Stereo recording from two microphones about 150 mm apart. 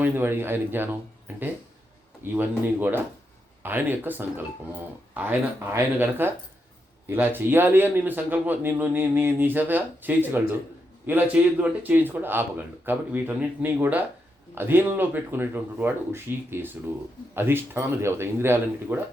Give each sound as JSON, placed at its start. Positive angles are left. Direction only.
{"t": 0.0, "sound": "speech", "side_deg": -15}
{"t": 2.2, "sound": "speech", "side_deg": -15}